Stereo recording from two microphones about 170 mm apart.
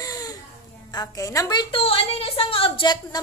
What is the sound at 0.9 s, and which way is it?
A woman's voice, 20° left (ahead or behind).